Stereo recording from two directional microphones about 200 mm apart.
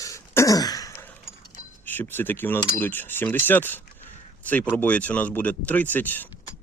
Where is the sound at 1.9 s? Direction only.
10° left (ahead or behind).